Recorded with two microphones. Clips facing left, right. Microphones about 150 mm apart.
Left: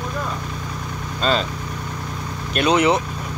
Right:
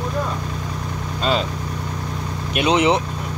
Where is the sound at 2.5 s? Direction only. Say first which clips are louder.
Even; 20° right (ahead or behind).